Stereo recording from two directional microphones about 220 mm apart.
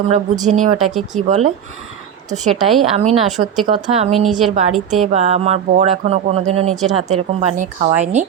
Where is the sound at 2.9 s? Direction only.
30° right (ahead or behind).